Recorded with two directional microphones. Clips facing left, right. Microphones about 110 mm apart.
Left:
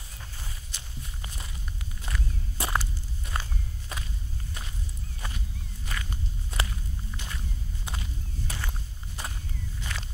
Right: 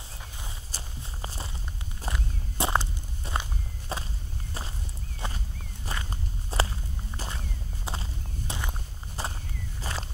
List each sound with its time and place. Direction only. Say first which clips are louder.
0.2 s walk: even; 20° right (ahead or behind)
0.7 s walk: right 2 dB; 35° right (ahead or behind)
5.2 s a sound: right 4 dB; 25° right (ahead or behind)
5.9 s walk: right 2 dB; 30° right (ahead or behind)
7.2 s whip: right 5 dB; 30° right (ahead or behind)
8.5 s walk: right 2 dB; 25° right (ahead or behind)